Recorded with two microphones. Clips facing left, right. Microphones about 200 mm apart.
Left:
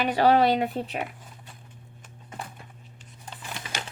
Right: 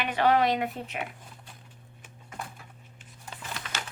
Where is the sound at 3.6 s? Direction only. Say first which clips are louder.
Left 3 dB; 15° left (ahead or behind).